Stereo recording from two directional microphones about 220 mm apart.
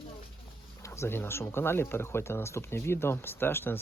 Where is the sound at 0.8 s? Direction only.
15° left (ahead or behind).